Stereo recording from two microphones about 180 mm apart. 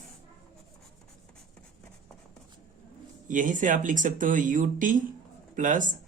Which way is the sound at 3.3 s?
45° right (ahead or behind).